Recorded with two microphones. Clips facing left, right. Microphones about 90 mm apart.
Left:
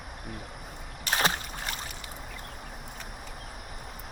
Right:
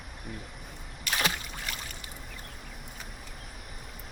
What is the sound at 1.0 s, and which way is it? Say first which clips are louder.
Rowboat: left 3 dB; 35° left (ahead or behind).